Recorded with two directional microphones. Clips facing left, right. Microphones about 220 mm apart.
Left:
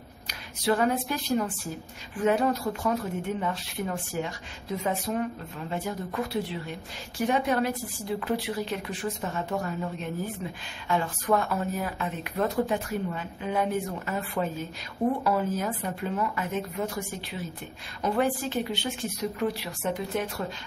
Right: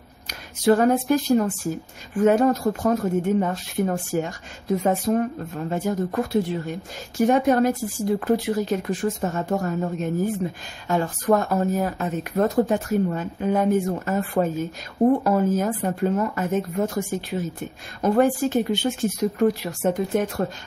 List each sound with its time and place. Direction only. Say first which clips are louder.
0.3 s speech: right 8 dB; 45° right (ahead or behind)